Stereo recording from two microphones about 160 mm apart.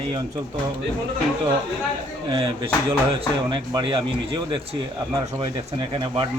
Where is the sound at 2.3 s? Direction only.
35° right (ahead or behind).